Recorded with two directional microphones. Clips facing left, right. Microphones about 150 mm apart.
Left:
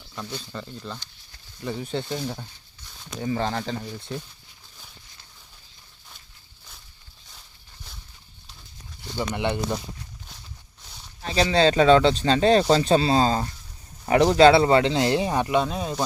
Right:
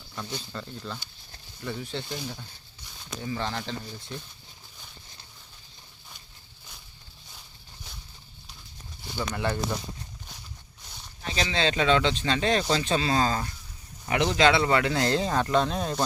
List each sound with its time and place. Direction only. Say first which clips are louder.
0.5 s speech: left 2 dB; 5° left (ahead or behind)
1.6 s speech: left 5 dB; 30° left (ahead or behind)
3.2 s speech: left 6 dB; 45° left (ahead or behind)
4.1 s speech: left 6 dB; centre (ahead or behind)
9.1 s speech: left 3 dB; 20° left (ahead or behind)
11.2 s speech: left 8 dB; 35° left (ahead or behind)
14.0 s speech: left 7 dB; 40° left (ahead or behind); by 16.0 s 5° left (ahead or behind)